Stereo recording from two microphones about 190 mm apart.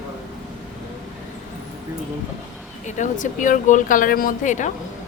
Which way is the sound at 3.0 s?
40° left (ahead or behind).